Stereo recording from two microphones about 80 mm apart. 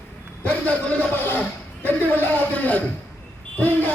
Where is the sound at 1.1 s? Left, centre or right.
Left.